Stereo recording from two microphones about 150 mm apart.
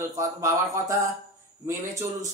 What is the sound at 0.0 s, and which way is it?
Speech, 20° right (ahead or behind).